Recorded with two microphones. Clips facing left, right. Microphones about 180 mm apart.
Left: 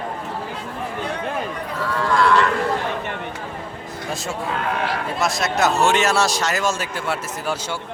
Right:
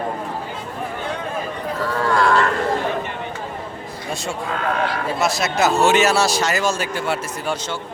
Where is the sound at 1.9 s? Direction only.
40° right (ahead or behind).